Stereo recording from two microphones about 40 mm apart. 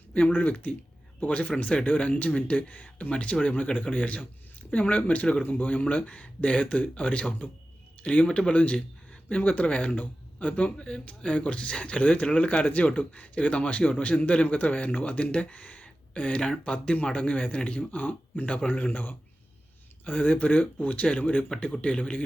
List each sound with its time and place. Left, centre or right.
0.1 s speech: left
14.4 s speech: left
17.9 s speech: left
18.4 s speech: left
18.9 s speech: left
20.1 s speech: left
21.8 s speech: left